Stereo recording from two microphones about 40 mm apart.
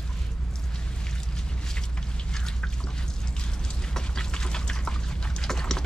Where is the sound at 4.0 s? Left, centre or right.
Centre.